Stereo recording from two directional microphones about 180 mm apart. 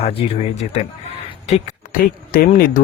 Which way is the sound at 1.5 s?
50° left (ahead or behind).